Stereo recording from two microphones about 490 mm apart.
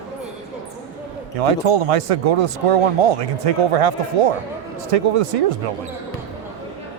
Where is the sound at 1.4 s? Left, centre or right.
Right.